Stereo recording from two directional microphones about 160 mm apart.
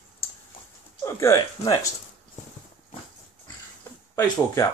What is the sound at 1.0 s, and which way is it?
Speech, 20° left (ahead or behind).